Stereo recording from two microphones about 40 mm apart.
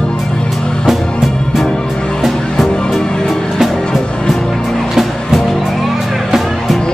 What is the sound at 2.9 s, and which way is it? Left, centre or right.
Music, centre.